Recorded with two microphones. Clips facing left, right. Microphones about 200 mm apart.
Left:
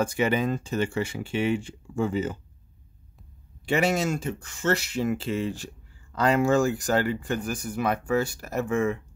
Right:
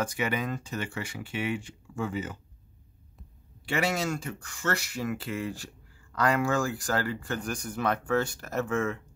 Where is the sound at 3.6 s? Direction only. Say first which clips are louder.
Left 5 dB; 20° left (ahead or behind).